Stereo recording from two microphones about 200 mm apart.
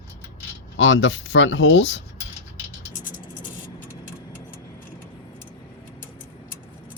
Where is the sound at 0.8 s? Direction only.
70° left (ahead or behind).